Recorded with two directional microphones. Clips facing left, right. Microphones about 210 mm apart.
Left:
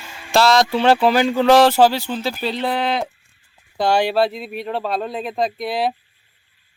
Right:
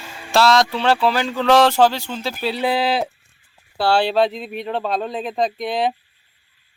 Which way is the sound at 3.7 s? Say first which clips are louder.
Even; 15° left (ahead or behind).